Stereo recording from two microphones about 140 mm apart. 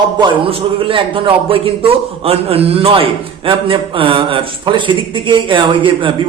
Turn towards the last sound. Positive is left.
turn(degrees=-35)  # may be behind; listen again after turning